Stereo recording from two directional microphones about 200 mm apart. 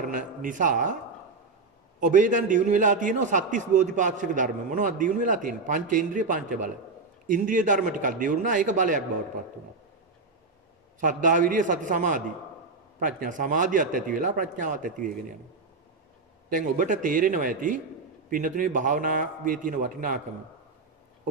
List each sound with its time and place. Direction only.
0.1 s a man's voice: 40° right (ahead or behind)
2.0 s a man's voice: 40° right (ahead or behind)
11.0 s a man's voice: 40° right (ahead or behind)
16.4 s a man's voice: 40° right (ahead or behind)